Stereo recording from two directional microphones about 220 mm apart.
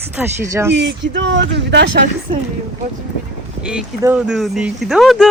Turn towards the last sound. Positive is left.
turn(degrees=0)  # may be behind; listen again after turning